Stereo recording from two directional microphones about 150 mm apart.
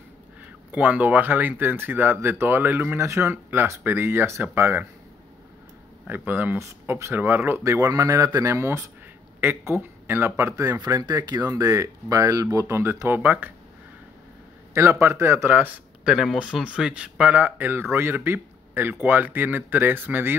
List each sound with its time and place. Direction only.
0.7 s speech: 10° right (ahead or behind)
6.0 s a man's voice: 15° right (ahead or behind)
14.7 s speech: 15° right (ahead or behind)